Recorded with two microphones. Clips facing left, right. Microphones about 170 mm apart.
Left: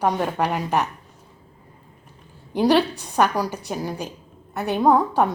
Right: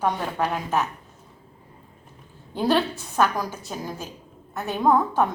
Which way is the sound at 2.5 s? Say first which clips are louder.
Left 4 dB; 15° left (ahead or behind).